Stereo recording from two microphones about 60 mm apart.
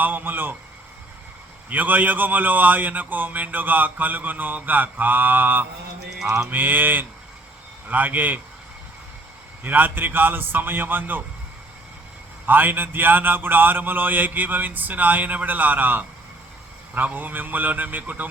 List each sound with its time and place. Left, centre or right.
0.0 s speech: right
1.7 s speech: right
9.6 s speech: right
12.5 s speech: right